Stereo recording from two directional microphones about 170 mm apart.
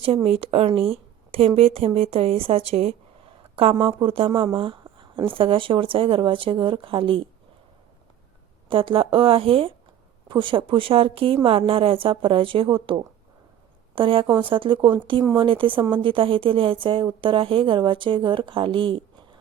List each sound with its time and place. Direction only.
0.0 s a woman's voice: 30° right (ahead or behind)
8.7 s a woman's voice: 30° right (ahead or behind)